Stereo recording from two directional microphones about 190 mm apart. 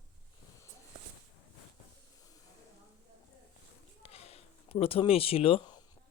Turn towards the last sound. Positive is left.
turn(degrees=25)  # may be behind; listen again after turning